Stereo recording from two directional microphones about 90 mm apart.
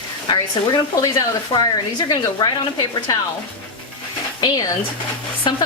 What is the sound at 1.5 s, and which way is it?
Speech, 50° left (ahead or behind).